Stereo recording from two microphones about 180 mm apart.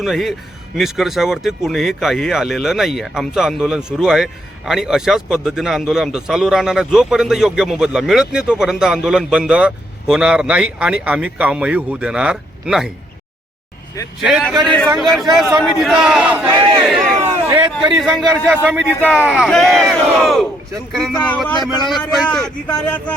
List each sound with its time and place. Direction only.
0.0 s speech: centre (ahead or behind)
14.2 s speech: 5° right (ahead or behind)
17.4 s a sound: 30° right (ahead or behind)
17.9 s speech: centre (ahead or behind)